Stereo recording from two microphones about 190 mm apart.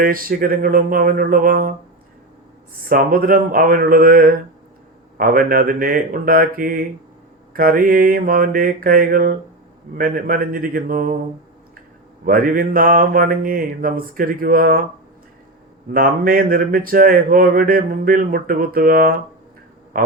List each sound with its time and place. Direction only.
0.0 s speech: 50° right (ahead or behind)
2.9 s speech: 50° right (ahead or behind)
12.2 s speech: 50° right (ahead or behind)
15.9 s speech: 50° right (ahead or behind)